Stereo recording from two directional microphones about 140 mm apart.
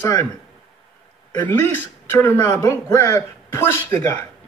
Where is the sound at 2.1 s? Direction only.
20° left (ahead or behind).